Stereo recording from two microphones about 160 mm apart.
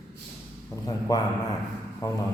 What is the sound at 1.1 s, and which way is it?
Speech, 25° left (ahead or behind).